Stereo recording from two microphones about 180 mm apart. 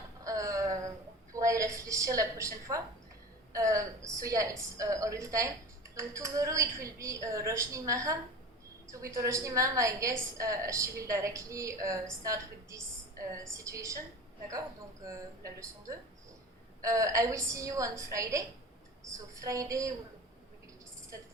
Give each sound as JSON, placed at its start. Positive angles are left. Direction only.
{"t": 0.3, "sound": "a sound", "side_deg": -20}
{"t": 1.3, "sound": "a woman's voice", "side_deg": -20}
{"t": 15.0, "sound": "a woman's voice", "side_deg": -20}